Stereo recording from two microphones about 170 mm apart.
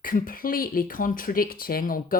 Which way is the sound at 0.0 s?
55° left (ahead or behind).